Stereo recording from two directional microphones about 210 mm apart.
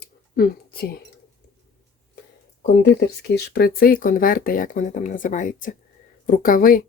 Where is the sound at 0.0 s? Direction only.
45° left (ahead or behind).